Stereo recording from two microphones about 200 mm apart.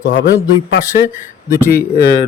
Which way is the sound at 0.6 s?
60° left (ahead or behind).